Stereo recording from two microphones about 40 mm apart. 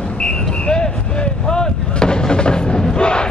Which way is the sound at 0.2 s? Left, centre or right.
Centre.